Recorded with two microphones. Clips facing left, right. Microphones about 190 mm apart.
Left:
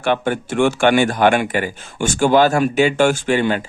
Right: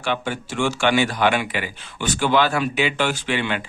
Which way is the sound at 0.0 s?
55° left (ahead or behind).